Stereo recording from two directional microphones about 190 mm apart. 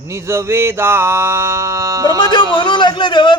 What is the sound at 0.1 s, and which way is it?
Mantra, 15° right (ahead or behind).